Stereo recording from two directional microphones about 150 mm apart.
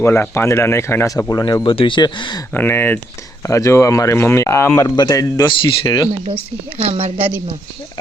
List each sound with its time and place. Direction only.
0.0 s speech: 15° left (ahead or behind)
2.5 s speech: 15° left (ahead or behind); by 6.1 s 30° left (ahead or behind)
6.8 s speech: 40° right (ahead or behind)